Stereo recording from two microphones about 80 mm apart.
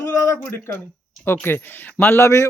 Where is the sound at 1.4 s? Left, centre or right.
Left.